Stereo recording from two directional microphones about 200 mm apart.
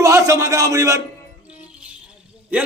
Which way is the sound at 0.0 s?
15° right (ahead or behind).